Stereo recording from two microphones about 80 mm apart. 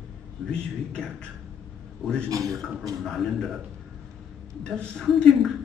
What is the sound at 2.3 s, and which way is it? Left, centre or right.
Speech, right.